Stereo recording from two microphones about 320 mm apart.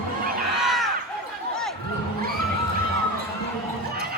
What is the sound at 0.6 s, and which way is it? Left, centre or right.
Basketball bounce, centre.